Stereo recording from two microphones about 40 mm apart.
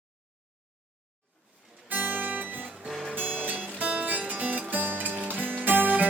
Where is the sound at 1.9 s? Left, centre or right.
Right.